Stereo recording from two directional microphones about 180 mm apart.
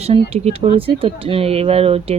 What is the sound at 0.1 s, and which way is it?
Speech, 35° right (ahead or behind).